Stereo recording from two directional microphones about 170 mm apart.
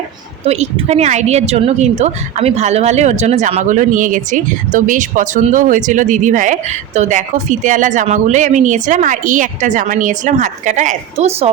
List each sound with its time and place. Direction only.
0.4 s a woman's voice: 40° right (ahead or behind)